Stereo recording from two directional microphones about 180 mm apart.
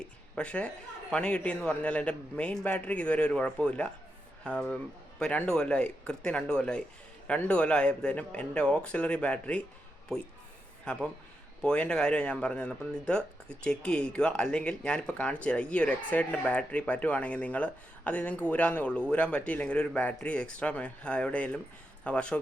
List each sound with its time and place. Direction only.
0.3 s speech: 5° left (ahead or behind)
10.9 s speech: 5° left (ahead or behind)